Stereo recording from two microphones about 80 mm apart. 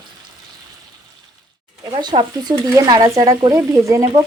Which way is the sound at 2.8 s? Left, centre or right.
Right.